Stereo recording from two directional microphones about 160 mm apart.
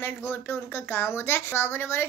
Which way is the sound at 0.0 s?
15° left (ahead or behind).